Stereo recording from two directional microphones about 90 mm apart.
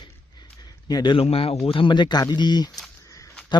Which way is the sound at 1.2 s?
90° left.